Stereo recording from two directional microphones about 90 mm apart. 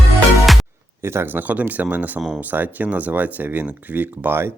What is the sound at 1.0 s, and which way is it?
Speech, 25° right (ahead or behind).